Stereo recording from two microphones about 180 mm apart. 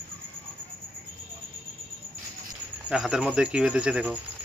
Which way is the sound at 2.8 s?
5° right (ahead or behind).